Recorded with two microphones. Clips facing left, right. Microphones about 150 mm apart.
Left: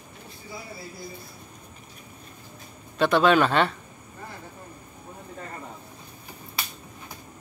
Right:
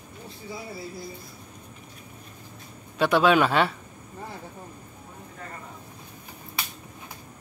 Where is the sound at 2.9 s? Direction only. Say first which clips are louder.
Even; 10° right (ahead or behind).